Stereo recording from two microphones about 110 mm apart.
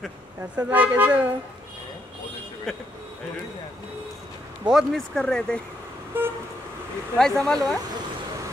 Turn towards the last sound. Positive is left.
turn(degrees=5)  # may be behind; listen again after turning